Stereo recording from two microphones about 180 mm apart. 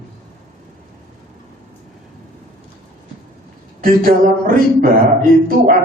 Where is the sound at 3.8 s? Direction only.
50° right (ahead or behind).